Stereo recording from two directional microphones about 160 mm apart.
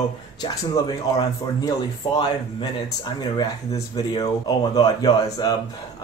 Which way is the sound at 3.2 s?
25° left (ahead or behind).